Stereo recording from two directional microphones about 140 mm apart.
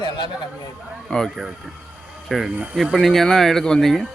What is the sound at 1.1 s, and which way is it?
Speech, centre (ahead or behind).